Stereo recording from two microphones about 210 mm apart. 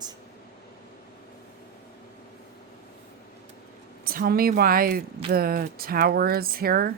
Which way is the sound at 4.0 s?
45° right (ahead or behind).